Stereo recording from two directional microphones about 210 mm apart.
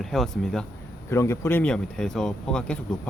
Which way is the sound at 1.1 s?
10° left (ahead or behind).